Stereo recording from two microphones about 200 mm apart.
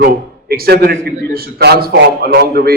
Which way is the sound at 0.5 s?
50° right (ahead or behind).